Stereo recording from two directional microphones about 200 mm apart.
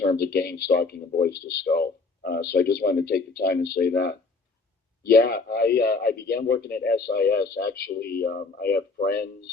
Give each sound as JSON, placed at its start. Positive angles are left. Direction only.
{"t": 0.0, "sound": "a man's voice", "side_deg": 50}